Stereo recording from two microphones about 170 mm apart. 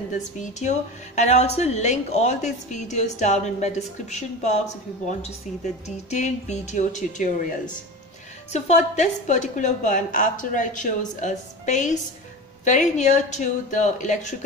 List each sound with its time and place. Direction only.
0.1 s a woman's voice: 45° left (ahead or behind)